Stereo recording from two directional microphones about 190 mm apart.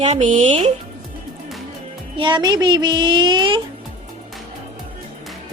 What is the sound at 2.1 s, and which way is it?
Music, 25° right (ahead or behind).